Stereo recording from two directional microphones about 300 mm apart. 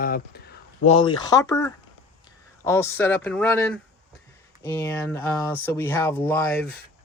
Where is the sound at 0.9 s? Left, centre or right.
Centre.